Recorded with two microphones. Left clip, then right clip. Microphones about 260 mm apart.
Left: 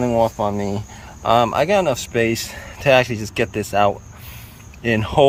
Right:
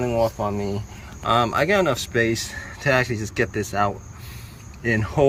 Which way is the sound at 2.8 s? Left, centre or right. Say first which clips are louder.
Left 6 dB; left.